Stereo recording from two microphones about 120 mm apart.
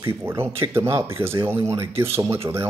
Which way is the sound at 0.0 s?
20° right (ahead or behind).